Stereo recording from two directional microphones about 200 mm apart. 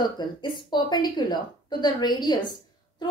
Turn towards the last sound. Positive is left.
turn(degrees=20)  # may be behind; listen again after turning